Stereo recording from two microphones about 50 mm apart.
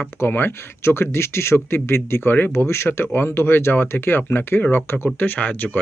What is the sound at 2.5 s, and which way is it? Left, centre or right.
Speech, left.